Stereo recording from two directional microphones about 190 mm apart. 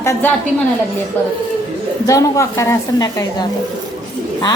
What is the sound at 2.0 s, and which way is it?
A woman's voice, 15° left (ahead or behind).